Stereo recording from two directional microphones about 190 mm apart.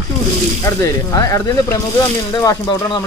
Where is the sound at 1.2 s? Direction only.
15° left (ahead or behind).